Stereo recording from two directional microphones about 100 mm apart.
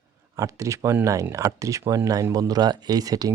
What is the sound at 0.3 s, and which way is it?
Speech, 35° right (ahead or behind).